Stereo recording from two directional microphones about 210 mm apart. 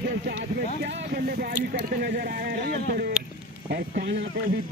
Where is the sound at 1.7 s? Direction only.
40° right (ahead or behind).